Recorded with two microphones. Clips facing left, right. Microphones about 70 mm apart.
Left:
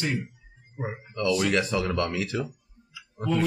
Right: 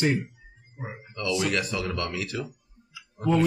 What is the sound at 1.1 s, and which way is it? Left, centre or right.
Speech, left.